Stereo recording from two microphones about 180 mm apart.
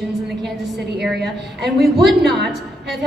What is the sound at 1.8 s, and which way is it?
Speech, centre (ahead or behind).